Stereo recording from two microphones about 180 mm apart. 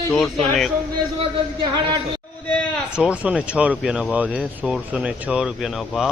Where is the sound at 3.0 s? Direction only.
5° right (ahead or behind).